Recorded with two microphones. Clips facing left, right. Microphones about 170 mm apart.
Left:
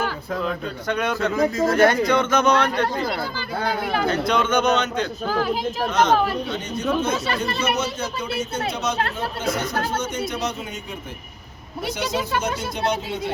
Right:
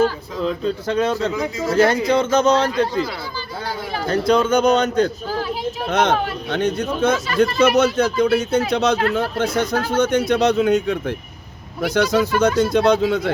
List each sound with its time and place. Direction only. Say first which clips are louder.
0.4 s speech: right 8 dB; 25° right (ahead or behind)
1.4 s speech: left 3 dB; 50° left (ahead or behind)
2.0 s speech: right 3 dB; 30° right (ahead or behind)
2.6 s speech: right 3 dB; 55° left (ahead or behind)
4.0 s a man's voice: right 7 dB; 35° right (ahead or behind)
5.3 s speech: left 1 dB; 50° left (ahead or behind)
5.9 s speech: right 1 dB; 55° right (ahead or behind); by 10.9 s 75° right (ahead or behind)
11.8 s speech: right 8 dB; 85° right